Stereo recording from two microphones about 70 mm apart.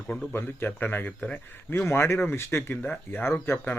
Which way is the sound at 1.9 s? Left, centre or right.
Left.